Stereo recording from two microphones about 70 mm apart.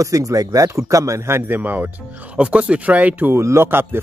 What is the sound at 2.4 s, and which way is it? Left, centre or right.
Speech, centre.